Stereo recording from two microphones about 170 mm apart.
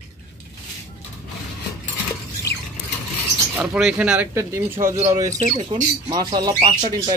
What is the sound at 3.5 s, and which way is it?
Speech, 10° right (ahead or behind).